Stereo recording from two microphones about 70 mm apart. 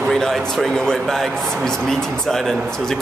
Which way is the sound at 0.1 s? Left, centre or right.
Centre.